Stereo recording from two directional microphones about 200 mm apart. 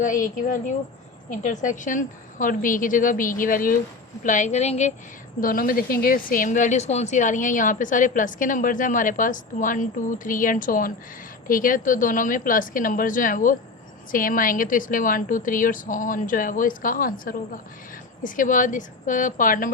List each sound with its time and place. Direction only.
0.0 s speech: 40° left (ahead or behind)
5.4 s a woman's voice: 45° left (ahead or behind)